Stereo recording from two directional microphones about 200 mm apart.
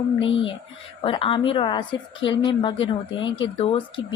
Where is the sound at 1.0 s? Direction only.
25° left (ahead or behind).